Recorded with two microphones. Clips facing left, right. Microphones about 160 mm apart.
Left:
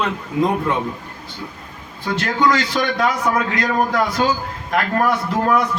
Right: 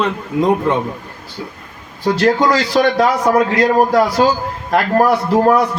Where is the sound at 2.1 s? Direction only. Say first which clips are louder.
Right 5 dB; 35° right (ahead or behind).